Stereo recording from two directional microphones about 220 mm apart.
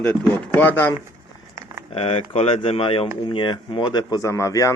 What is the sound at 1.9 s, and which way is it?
Speech, 25° left (ahead or behind).